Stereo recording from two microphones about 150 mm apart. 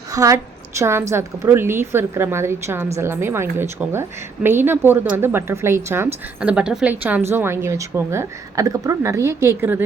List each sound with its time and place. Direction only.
0.1 s a woman's voice: 20° right (ahead or behind)